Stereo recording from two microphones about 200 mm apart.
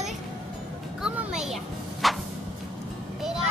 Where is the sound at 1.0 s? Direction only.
5° right (ahead or behind).